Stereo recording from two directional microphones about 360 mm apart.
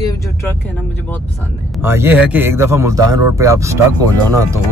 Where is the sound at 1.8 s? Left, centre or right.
Centre.